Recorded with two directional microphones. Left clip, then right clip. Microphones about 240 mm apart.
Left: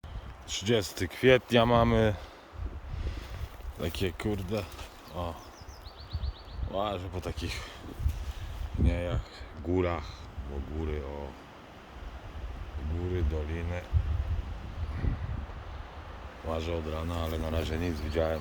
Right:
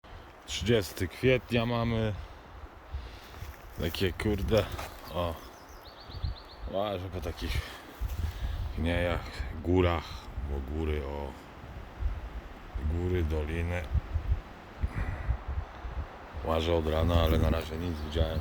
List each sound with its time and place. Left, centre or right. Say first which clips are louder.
0.4 s speech: even; centre
3.8 s speech: right 2 dB; centre
6.7 s speech: even; centre
8.8 s a man's voice: right 4 dB; centre
13.1 s a man's voice: right 3 dB; centre
16.5 s a man's voice: right 6 dB; centre
17.7 s speech: left 3 dB; centre